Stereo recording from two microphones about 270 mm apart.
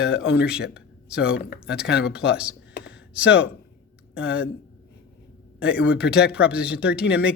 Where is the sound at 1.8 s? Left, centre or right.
Left.